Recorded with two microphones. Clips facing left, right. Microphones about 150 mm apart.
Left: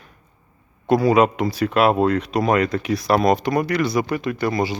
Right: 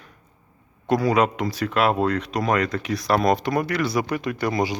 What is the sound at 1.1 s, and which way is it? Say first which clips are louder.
Speech: left 4 dB; 10° left (ahead or behind).